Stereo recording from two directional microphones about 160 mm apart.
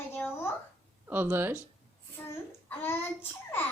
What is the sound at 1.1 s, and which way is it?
Speech, 15° right (ahead or behind).